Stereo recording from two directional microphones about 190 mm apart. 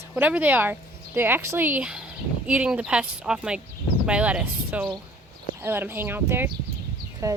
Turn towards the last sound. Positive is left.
turn(degrees=-15)  # may be behind; listen again after turning